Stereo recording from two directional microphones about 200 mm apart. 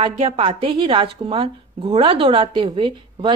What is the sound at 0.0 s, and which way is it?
A woman's voice, 25° right (ahead or behind).